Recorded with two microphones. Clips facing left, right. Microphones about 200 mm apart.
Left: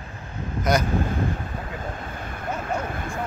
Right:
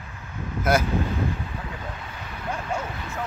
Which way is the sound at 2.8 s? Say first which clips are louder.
Left 4 dB; 50° left (ahead or behind).